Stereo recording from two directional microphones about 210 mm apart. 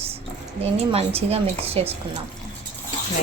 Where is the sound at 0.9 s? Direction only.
30° right (ahead or behind).